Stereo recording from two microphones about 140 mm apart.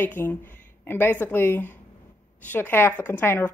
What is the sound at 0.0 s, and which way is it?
Speech, 15° left (ahead or behind).